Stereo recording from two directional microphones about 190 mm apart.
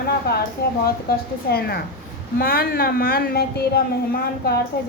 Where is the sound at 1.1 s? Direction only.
55° left (ahead or behind).